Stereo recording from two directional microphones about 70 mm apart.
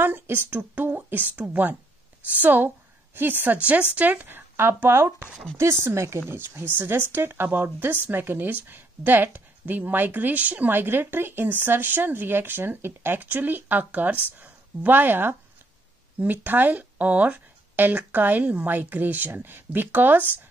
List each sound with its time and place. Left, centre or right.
0.0 s speech: right